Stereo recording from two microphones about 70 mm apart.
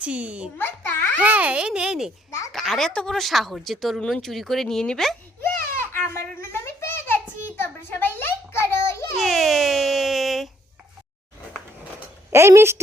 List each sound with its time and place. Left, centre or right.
0.0 s a child's voice: centre
0.6 s a child's voice: left
1.2 s a child's voice: right
2.5 s speech: centre
5.5 s a sound: left
9.1 s baby cry: centre
12.3 s speech: right